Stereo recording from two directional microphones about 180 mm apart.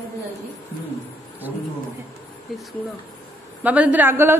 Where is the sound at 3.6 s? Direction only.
10° right (ahead or behind).